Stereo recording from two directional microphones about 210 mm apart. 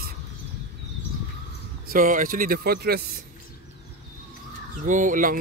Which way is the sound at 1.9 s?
40° right (ahead or behind).